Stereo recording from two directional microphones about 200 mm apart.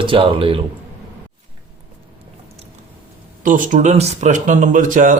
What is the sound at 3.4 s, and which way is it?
Speech, 40° right (ahead or behind).